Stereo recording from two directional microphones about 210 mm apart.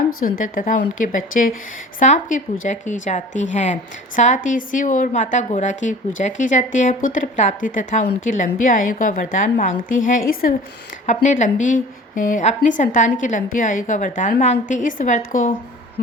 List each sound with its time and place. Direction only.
0.2 s a woman's voice: 40° left (ahead or behind)